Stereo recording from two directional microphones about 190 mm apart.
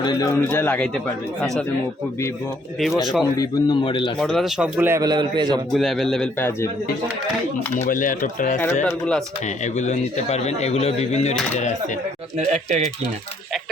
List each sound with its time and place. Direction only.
0.0 s speech: 20° left (ahead or behind)
3.0 s speech: centre (ahead or behind)
3.3 s a man's voice: 20° left (ahead or behind)
4.2 s a man's voice: centre (ahead or behind); by 5.5 s 20° right (ahead or behind)
5.7 s speech: centre (ahead or behind)
7.9 s speech: 45° left (ahead or behind)
8.8 s speech: 5° left (ahead or behind)
9.7 s speech: 35° left (ahead or behind)
12.4 s speech: 35° right (ahead or behind)